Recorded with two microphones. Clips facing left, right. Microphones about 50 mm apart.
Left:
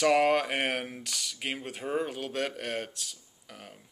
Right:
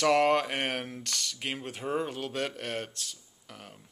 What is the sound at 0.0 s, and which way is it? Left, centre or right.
Speech, centre.